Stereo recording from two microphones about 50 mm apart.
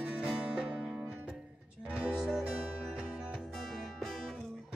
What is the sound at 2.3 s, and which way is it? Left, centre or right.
Music, centre.